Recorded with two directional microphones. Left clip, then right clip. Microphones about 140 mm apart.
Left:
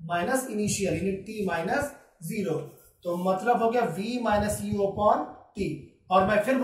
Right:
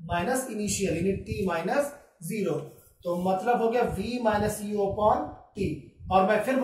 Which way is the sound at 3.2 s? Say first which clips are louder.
Left 1 dB; 35° left (ahead or behind).